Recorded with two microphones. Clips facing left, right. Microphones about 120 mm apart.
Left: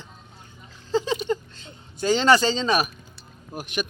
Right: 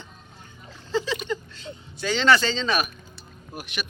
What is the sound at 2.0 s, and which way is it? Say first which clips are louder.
Speech: left 2 dB; 40° left (ahead or behind).